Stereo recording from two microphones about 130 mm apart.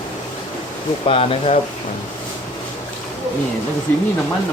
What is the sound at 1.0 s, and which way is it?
Speech, 45° left (ahead or behind).